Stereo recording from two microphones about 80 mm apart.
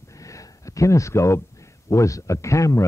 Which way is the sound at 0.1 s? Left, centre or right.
Left.